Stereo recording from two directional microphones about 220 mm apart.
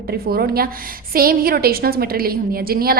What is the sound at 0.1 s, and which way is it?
A woman's voice, 45° right (ahead or behind).